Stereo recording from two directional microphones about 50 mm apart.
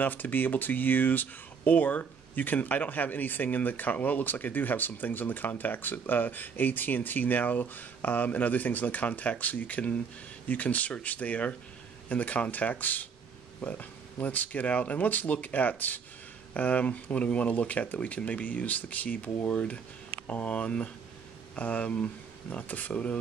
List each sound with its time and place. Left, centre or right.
0.0 s speech: left